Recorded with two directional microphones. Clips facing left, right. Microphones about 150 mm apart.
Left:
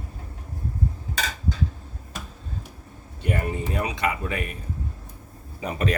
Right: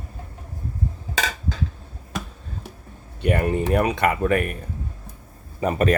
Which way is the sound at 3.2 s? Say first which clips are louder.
Right 6 dB; 70° right (ahead or behind).